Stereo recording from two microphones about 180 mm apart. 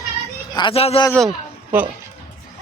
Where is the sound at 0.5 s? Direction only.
30° left (ahead or behind).